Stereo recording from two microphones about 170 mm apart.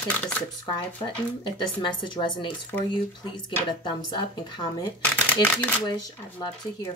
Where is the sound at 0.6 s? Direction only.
25° left (ahead or behind).